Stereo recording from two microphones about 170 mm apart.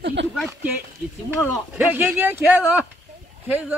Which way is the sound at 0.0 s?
90° right.